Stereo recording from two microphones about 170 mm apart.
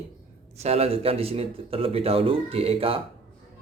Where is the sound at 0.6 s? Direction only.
40° right (ahead or behind).